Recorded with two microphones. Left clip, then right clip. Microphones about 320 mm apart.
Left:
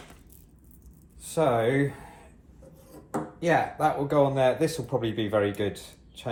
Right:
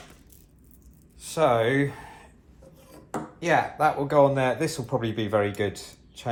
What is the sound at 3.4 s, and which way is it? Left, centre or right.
Speech, right.